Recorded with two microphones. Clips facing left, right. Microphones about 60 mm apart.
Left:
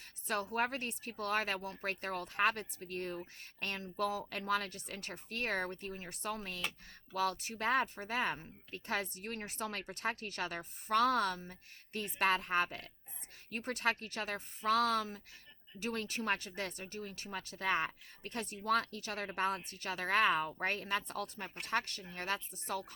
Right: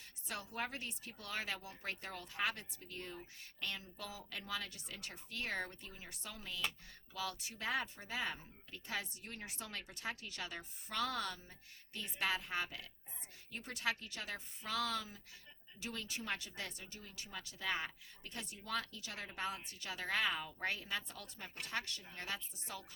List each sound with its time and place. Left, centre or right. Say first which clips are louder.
0.0 s speech: left 9 dB; left